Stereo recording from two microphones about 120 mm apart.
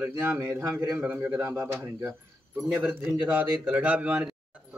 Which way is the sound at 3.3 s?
15° right (ahead or behind).